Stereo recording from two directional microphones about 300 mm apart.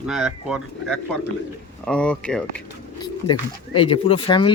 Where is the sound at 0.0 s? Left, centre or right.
Centre.